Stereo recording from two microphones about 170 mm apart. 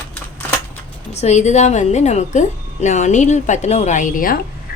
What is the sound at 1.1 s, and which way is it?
A woman's voice, 40° left (ahead or behind).